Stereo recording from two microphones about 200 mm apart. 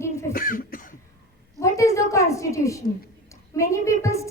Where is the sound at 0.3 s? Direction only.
45° left (ahead or behind).